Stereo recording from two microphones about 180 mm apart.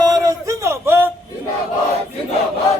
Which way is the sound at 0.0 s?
20° right (ahead or behind).